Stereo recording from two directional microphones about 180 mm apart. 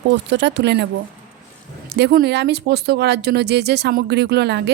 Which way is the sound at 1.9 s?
60° right (ahead or behind).